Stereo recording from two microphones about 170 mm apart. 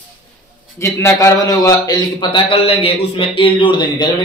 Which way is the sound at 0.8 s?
15° left (ahead or behind).